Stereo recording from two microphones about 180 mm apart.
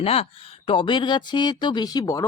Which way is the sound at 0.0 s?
35° left (ahead or behind).